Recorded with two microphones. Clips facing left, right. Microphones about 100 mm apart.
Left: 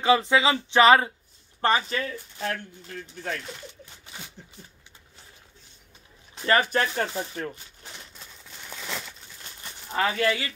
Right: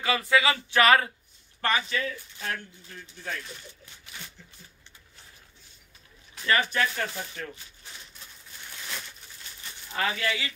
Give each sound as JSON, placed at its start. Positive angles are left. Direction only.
{"t": 0.0, "sound": "speech", "side_deg": 25}
{"t": 1.6, "sound": "speech", "side_deg": 35}
{"t": 2.9, "sound": "speech", "side_deg": 60}
{"t": 6.3, "sound": "speech", "side_deg": 35}
{"t": 8.5, "sound": "a sound", "side_deg": 90}
{"t": 9.4, "sound": "livestock", "side_deg": 45}
{"t": 10.1, "sound": "speech", "side_deg": 45}